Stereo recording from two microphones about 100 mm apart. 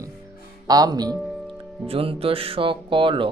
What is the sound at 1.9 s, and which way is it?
Speech, 70° right (ahead or behind).